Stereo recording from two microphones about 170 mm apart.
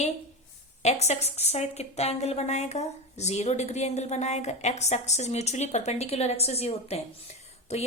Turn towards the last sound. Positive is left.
turn(degrees=40)  # may be behind; listen again after turning